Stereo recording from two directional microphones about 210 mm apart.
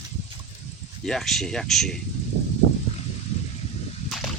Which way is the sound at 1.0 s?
Centre (ahead or behind).